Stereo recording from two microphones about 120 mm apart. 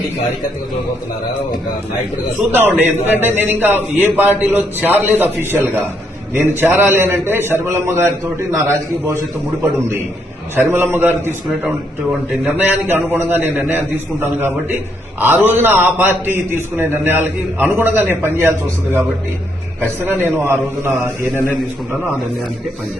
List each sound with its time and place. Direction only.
2.5 s a man's voice: 15° right (ahead or behind)
10.5 s a man's voice: 20° right (ahead or behind)
20.2 s a man's voice: 20° right (ahead or behind)